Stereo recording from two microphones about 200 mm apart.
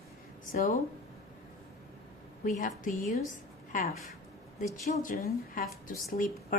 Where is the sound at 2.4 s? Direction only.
40° left (ahead or behind).